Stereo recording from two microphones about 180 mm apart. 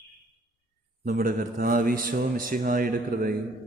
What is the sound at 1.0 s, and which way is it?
A man's voice, 50° right (ahead or behind).